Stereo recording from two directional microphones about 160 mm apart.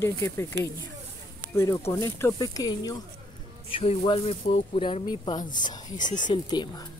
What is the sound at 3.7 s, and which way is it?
Speech, 35° left (ahead or behind).